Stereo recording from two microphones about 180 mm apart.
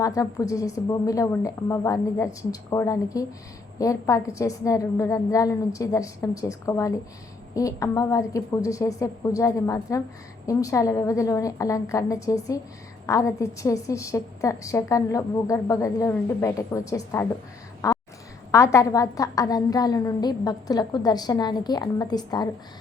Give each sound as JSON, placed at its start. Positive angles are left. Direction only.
{"t": 0.0, "sound": "a woman's voice", "side_deg": 20}
{"t": 17.8, "sound": "a sound", "side_deg": 20}
{"t": 18.5, "sound": "a woman's voice", "side_deg": 15}